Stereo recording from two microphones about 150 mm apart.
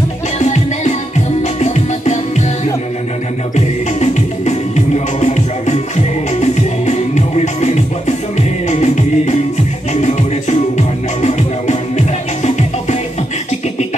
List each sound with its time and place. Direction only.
0.4 s music: 50° left (ahead or behind)